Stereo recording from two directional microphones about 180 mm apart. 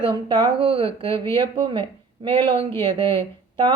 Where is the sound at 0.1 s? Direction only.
25° right (ahead or behind).